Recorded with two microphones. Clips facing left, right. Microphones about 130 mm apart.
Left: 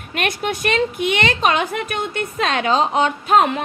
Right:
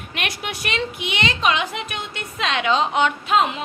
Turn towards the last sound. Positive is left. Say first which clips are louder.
# left 4 dB
turn(degrees=50)  # may be behind; listen again after turning